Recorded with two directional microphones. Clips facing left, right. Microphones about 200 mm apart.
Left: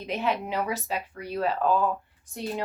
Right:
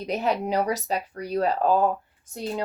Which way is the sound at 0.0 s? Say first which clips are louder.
Right 3 dB; 40° right (ahead or behind).